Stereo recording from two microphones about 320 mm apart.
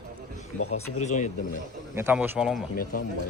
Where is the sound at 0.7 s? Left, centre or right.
Left.